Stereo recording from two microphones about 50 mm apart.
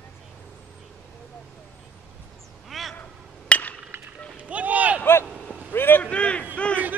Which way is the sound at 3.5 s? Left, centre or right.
Left.